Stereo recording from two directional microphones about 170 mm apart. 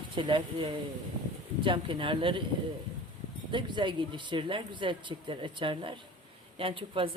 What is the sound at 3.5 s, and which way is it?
A woman's voice, 30° right (ahead or behind).